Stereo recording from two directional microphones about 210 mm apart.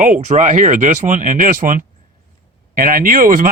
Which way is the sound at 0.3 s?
35° right (ahead or behind).